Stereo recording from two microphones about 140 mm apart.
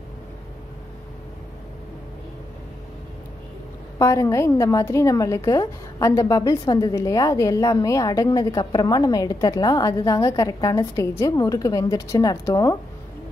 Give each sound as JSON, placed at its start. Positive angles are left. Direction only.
{"t": 4.0, "sound": "a woman's voice", "side_deg": 20}